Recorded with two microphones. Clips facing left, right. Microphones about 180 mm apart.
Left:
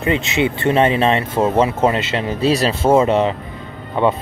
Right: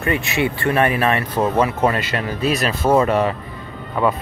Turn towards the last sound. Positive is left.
turn(degrees=25)  # may be behind; listen again after turning